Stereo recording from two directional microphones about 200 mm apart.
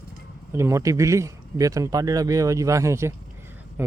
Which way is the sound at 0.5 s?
15° right (ahead or behind).